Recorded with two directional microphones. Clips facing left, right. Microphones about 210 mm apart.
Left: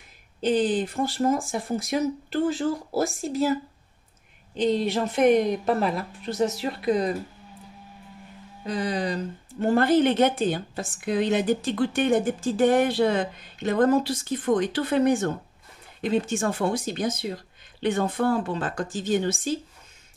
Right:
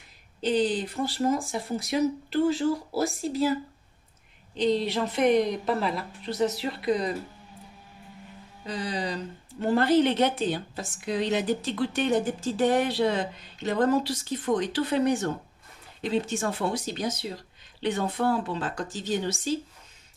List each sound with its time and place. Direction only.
0.4 s speech: 50° left (ahead or behind)
4.6 s speech: 45° left (ahead or behind)
8.6 s speech: 50° left (ahead or behind)